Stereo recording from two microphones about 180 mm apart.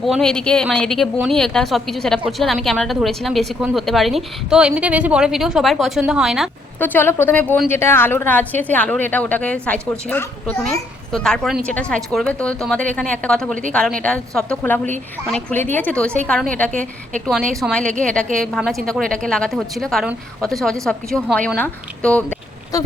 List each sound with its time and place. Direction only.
0.0 s speech: centre (ahead or behind)
6.7 s a woman's voice: 10° left (ahead or behind)
22.7 s a sound: 20° left (ahead or behind)